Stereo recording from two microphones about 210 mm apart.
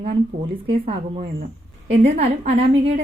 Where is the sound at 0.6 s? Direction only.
25° right (ahead or behind).